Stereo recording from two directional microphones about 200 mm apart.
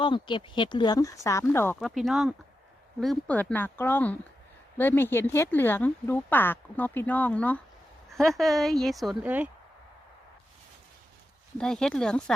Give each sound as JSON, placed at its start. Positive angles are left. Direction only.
{"t": 0.0, "sound": "speech", "side_deg": 25}
{"t": 1.8, "sound": "a woman's voice", "side_deg": 0}
{"t": 11.5, "sound": "a woman's voice", "side_deg": 5}